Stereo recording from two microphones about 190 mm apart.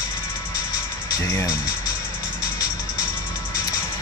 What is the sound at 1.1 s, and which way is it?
Speech, 15° left (ahead or behind).